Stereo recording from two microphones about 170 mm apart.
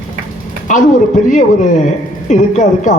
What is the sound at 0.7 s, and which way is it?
A man's voice, 45° left (ahead or behind).